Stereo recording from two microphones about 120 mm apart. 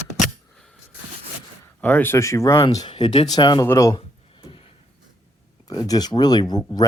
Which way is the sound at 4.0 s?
45° left (ahead or behind).